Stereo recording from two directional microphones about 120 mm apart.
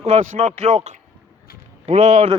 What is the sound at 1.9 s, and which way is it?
Speech, 75° right (ahead or behind).